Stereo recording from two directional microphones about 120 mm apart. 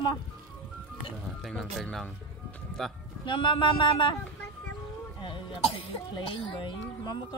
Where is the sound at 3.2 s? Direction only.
45° left (ahead or behind).